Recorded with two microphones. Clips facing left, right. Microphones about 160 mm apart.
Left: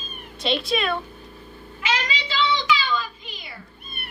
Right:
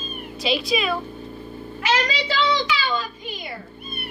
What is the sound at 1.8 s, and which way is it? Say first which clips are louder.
Child singing: right 4 dB; 40° right (ahead or behind).